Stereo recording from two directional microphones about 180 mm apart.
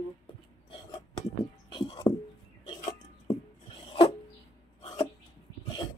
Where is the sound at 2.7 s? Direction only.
25° left (ahead or behind).